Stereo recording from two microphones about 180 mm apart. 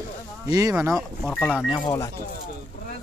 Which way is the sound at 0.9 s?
Centre (ahead or behind).